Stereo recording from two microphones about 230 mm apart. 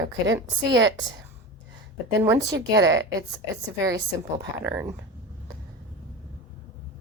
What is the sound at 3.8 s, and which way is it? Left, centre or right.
A woman's voice, centre.